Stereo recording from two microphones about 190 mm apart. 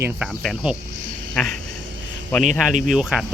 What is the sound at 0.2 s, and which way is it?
Cricket, centre (ahead or behind).